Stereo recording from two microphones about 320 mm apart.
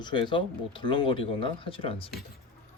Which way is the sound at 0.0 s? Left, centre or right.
Centre.